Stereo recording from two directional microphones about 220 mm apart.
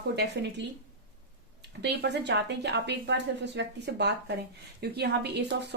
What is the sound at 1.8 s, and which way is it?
Speech, 50° right (ahead or behind).